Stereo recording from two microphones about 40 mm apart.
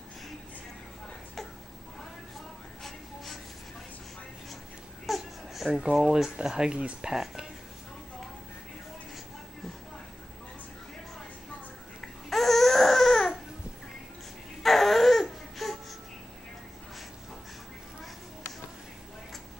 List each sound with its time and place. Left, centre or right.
5.0 s a sound: centre
6.0 s speech: centre
7.1 s speech: centre
12.3 s baby cry: centre
14.6 s baby cry: centre